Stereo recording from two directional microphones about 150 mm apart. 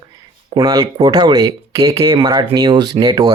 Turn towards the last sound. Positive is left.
turn(degrees=-25)  # may be behind; listen again after turning